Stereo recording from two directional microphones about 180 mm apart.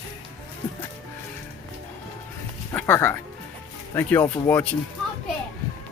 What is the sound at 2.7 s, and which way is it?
Speech, 10° left (ahead or behind).